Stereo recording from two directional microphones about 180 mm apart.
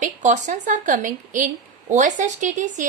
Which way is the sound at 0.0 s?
40° right (ahead or behind).